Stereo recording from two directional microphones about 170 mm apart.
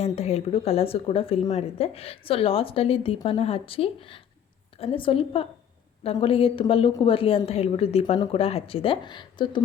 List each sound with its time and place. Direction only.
0.0 s a woman's voice: 40° left (ahead or behind)